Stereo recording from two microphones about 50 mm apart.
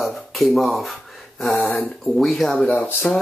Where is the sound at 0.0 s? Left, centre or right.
Centre.